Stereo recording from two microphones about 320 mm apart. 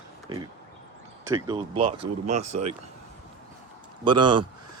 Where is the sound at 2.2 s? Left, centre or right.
Right.